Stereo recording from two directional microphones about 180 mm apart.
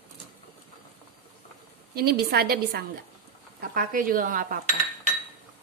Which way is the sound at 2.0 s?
60° right (ahead or behind).